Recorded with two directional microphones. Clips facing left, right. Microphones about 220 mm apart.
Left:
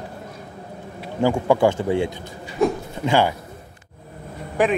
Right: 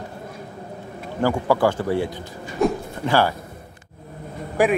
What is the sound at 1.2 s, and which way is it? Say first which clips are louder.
Speech: left 2 dB; 20° left (ahead or behind).